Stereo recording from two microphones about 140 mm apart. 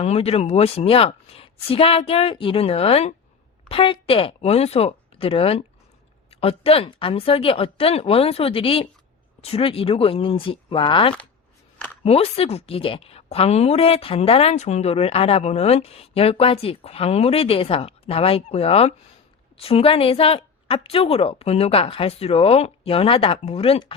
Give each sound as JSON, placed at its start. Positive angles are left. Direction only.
{"t": 0.0, "sound": "a woman's voice", "side_deg": 45}